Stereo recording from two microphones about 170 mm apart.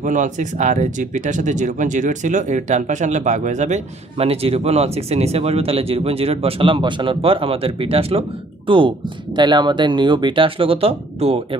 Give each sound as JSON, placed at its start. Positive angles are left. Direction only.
{"t": 0.0, "sound": "speech", "side_deg": -50}